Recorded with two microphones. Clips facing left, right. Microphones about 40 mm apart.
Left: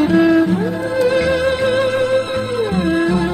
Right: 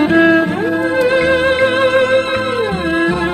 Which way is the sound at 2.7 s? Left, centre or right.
Right.